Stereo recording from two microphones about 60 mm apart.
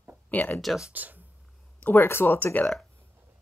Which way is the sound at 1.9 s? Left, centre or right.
Left.